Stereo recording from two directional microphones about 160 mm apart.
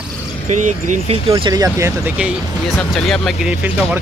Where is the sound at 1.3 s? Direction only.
25° right (ahead or behind).